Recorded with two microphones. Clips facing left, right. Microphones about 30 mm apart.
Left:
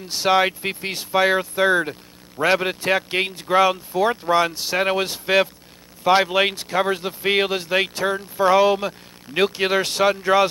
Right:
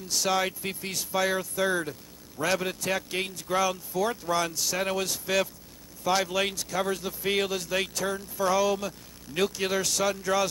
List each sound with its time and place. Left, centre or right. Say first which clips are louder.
0.1 s speech: left 8 dB; left